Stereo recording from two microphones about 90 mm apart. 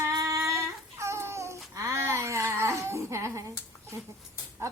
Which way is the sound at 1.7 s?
35° right (ahead or behind).